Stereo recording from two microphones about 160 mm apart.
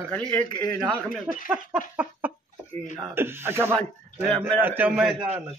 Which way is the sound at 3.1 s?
15° right (ahead or behind).